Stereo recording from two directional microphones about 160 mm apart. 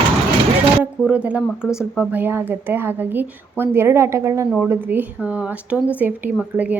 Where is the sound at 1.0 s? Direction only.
10° right (ahead or behind).